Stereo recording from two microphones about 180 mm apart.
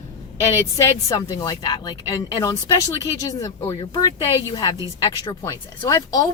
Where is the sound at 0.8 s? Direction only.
20° left (ahead or behind).